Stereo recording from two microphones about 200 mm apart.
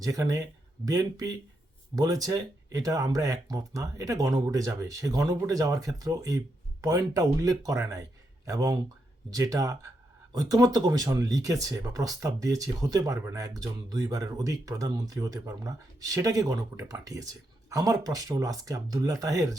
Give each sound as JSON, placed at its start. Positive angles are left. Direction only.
{"t": 0.0, "sound": "speech", "side_deg": -15}